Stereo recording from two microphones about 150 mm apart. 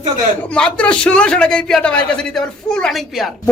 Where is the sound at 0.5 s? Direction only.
5° left (ahead or behind).